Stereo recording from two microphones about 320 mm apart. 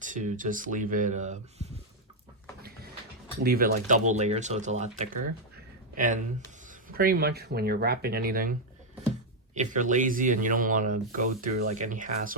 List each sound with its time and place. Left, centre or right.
0.0 s speech: right
3.4 s speech: right
9.6 s speech: right